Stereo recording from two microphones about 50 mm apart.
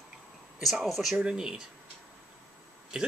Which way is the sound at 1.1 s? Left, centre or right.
Right.